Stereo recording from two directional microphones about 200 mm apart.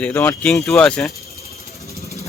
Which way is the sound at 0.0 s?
10° left (ahead or behind).